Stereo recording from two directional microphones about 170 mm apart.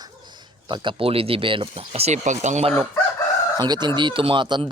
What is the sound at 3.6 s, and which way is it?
Speech, 25° right (ahead or behind).